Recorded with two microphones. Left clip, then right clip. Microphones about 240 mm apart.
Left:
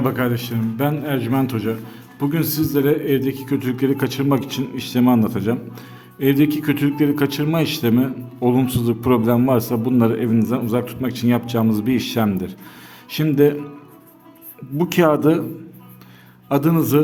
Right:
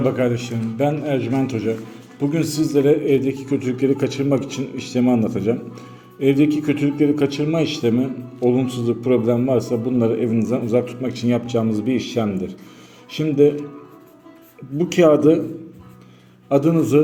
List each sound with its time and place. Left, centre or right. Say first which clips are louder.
0.0 s a man's voice: right 2 dB; left
14.8 s a man's voice: right 2 dB; left
16.5 s a man's voice: right 1 dB; left